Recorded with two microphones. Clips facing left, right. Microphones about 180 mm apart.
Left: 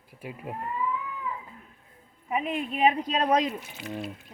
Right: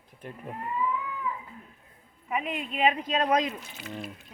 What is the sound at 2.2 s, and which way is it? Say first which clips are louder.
Speech: left 3 dB; 25° left (ahead or behind).